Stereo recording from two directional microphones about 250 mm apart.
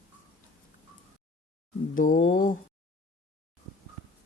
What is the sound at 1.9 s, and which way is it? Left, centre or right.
Speech, left.